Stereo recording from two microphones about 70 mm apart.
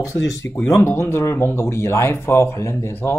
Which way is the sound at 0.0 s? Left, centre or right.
Left.